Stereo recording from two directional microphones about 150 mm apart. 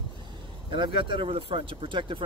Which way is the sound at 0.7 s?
35° right (ahead or behind).